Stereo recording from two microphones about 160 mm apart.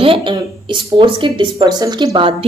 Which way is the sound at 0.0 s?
35° right (ahead or behind).